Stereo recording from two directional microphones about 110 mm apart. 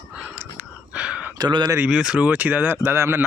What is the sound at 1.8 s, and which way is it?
Speech, 10° right (ahead or behind).